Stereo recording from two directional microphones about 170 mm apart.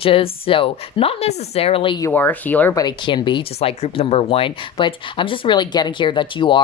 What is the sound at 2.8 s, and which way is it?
Speech, 25° left (ahead or behind).